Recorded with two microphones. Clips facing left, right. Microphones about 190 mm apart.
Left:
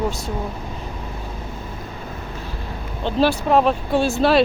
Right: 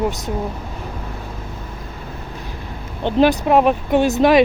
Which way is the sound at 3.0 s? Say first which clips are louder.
Right 4 dB; 20° right (ahead or behind).